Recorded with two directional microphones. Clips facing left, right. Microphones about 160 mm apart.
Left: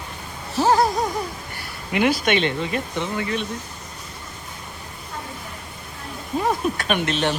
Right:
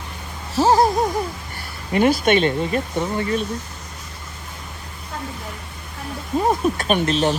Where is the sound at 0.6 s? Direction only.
20° right (ahead or behind).